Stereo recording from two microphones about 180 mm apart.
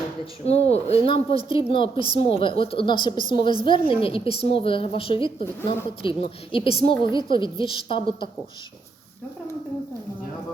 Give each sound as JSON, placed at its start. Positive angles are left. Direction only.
{"t": 0.4, "sound": "a woman's voice", "side_deg": 35}